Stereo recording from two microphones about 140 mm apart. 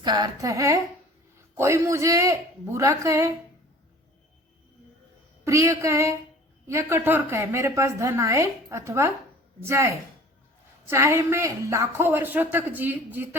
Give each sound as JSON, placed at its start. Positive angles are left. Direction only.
{"t": 0.0, "sound": "a woman's voice", "side_deg": -30}
{"t": 5.5, "sound": "a woman's voice", "side_deg": -20}